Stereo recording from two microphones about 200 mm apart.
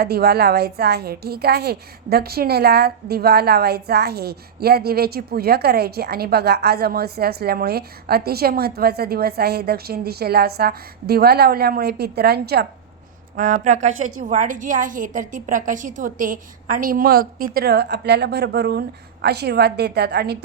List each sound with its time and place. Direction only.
0.0 s a woman's voice: 50° right (ahead or behind)
13.3 s a woman's voice: 40° right (ahead or behind)